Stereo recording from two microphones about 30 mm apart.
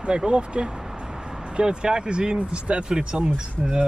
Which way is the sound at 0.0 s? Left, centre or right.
Right.